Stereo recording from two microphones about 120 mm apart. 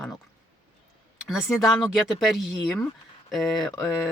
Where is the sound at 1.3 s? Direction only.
5° right (ahead or behind).